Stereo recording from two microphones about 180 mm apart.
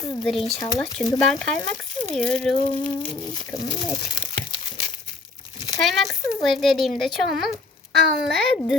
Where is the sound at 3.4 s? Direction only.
20° left (ahead or behind).